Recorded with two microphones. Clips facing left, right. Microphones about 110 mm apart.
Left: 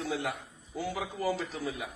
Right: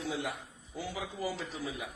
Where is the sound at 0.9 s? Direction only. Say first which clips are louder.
Left 5 dB; 65° left (ahead or behind).